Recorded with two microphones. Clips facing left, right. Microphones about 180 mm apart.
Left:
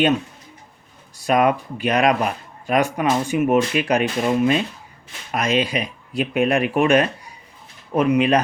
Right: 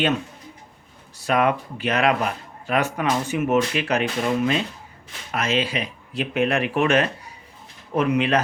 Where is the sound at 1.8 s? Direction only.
15° left (ahead or behind).